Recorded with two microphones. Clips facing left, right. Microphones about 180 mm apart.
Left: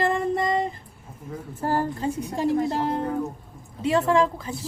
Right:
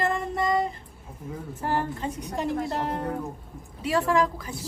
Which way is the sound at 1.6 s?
35° left (ahead or behind).